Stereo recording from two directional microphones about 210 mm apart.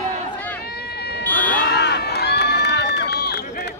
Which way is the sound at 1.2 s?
10° left (ahead or behind).